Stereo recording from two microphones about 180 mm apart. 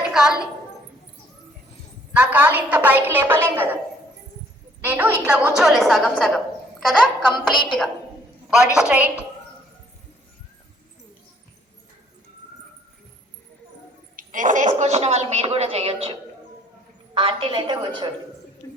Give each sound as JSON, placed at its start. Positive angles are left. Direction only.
{"t": 0.1, "sound": "a woman's voice", "side_deg": -5}
{"t": 2.1, "sound": "a woman's voice", "side_deg": -10}
{"t": 4.8, "sound": "a woman's voice", "side_deg": -10}
{"t": 7.5, "sound": "a woman's voice", "side_deg": 25}
{"t": 8.7, "sound": "a woman's voice", "side_deg": -5}
{"t": 14.2, "sound": "a woman's voice", "side_deg": -45}
{"t": 17.2, "sound": "a woman's voice", "side_deg": -30}
{"t": 18.6, "sound": "a sound", "side_deg": 20}